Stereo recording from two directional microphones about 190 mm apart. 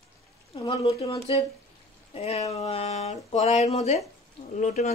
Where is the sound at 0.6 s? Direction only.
25° left (ahead or behind).